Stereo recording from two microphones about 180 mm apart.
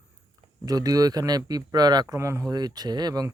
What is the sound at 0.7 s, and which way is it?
Speech, 20° right (ahead or behind).